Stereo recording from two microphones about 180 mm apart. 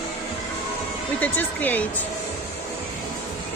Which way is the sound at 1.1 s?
10° left (ahead or behind).